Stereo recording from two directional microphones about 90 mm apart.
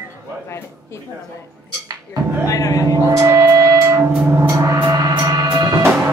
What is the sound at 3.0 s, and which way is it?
Music, 35° right (ahead or behind).